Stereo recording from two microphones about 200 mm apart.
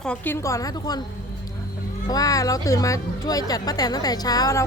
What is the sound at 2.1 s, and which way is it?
Speech, 15° left (ahead or behind).